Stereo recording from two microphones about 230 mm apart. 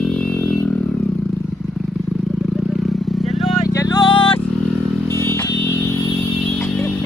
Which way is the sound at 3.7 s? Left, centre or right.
Centre.